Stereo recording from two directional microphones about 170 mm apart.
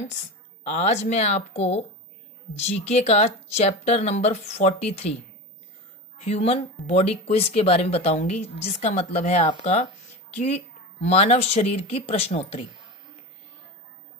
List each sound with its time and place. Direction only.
0.7 s speech: 40° left (ahead or behind)